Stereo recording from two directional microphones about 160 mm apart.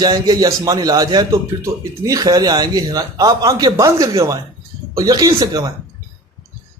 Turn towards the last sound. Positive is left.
turn(degrees=-25)  # may be behind; listen again after turning